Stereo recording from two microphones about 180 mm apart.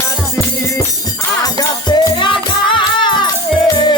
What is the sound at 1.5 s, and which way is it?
Music, 25° left (ahead or behind).